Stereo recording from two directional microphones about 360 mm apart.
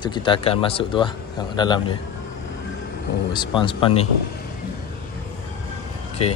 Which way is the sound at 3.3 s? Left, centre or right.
Centre.